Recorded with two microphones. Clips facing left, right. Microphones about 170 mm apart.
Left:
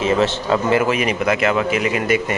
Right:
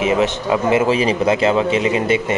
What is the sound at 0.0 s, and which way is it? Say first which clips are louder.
Speech: right 1 dB; 15° right (ahead or behind).